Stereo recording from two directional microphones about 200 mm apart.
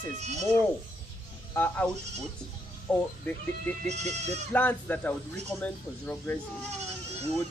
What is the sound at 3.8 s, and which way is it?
Speech, 35° right (ahead or behind).